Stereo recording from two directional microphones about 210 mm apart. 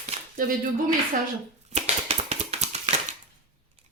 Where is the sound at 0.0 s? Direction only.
35° right (ahead or behind).